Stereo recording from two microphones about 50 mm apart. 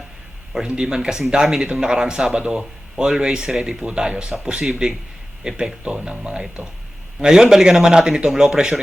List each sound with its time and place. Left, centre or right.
0.7 s speech: centre